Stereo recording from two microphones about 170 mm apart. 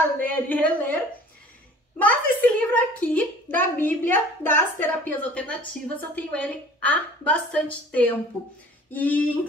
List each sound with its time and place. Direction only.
0.2 s a woman's voice: 10° left (ahead or behind)
2.0 s a woman's voice: 10° left (ahead or behind)